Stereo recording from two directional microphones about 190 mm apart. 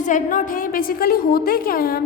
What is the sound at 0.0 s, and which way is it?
A woman's voice, 45° left (ahead or behind).